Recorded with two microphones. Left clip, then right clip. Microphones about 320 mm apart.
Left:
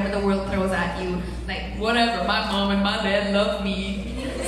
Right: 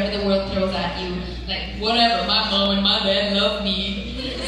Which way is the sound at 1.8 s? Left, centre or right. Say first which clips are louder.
Right 3 dB; left.